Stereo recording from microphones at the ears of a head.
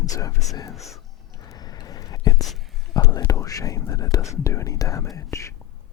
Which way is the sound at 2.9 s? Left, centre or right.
Left.